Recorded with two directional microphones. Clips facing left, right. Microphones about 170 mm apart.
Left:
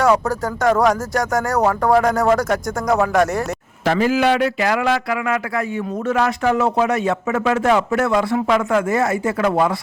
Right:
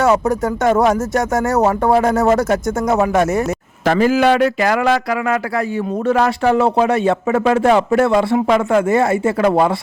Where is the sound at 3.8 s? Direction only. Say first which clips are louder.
Right 3 dB; 45° right (ahead or behind); by 9.7 s 30° right (ahead or behind).